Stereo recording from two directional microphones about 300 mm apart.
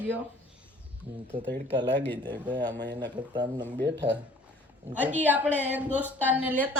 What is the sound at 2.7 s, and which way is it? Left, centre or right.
Speech, right.